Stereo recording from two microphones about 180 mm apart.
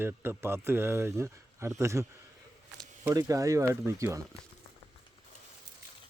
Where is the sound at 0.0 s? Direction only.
10° right (ahead or behind).